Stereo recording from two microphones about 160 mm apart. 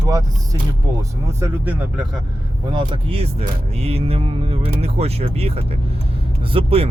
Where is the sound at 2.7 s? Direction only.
30° right (ahead or behind).